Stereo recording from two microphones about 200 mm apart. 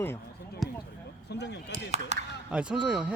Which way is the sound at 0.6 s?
Centre (ahead or behind).